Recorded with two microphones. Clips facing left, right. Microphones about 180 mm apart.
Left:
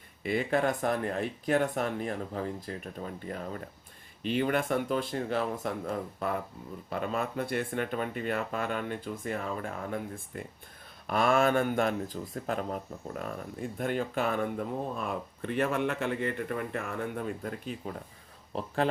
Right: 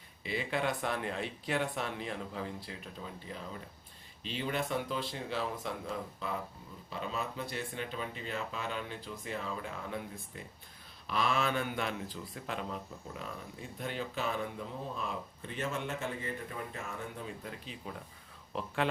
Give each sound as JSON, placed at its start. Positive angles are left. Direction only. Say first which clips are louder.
{"t": 0.2, "sound": "speech", "louder": "left 7 dB", "side_deg": 50}
{"t": 18.8, "sound": "speech", "louder": "left 4 dB", "side_deg": 40}